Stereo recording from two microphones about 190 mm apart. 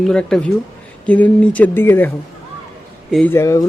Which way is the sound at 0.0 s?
5° left (ahead or behind).